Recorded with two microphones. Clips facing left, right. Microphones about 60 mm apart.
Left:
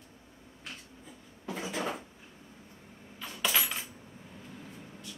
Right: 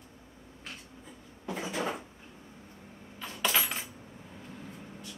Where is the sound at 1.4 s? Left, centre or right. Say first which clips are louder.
Right 1 dB; centre.